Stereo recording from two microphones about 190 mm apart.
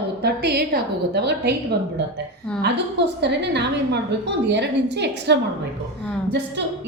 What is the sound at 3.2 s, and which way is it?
A woman's voice, 65° right (ahead or behind).